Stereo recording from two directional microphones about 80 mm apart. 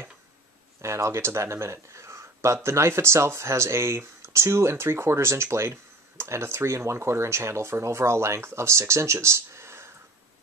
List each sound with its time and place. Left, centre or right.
0.7 s speech: right